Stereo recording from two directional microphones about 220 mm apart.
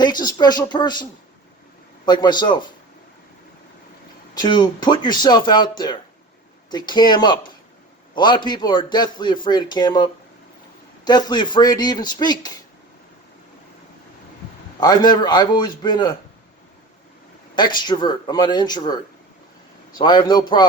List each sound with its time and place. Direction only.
0.0 s a man's voice: 20° left (ahead or behind)
2.0 s a man's voice: 20° left (ahead or behind)
4.4 s a man's voice: 20° left (ahead or behind)
14.8 s a man's voice: 20° left (ahead or behind)
17.5 s a man's voice: 20° left (ahead or behind)